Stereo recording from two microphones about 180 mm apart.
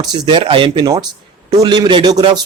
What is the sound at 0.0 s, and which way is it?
Speech, 25° right (ahead or behind).